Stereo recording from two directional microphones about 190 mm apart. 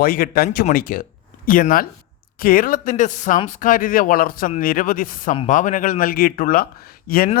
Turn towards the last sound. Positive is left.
turn(degrees=50)  # may be behind; listen again after turning